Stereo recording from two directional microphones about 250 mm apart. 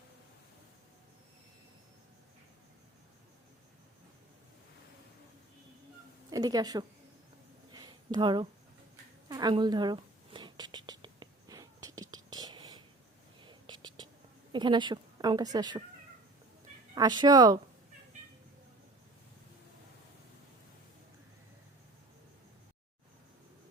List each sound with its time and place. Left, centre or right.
6.3 s a woman's voice: centre
7.7 s a sound: centre
9.3 s whispering: centre
14.5 s a woman's voice: centre
16.9 s a woman's voice: centre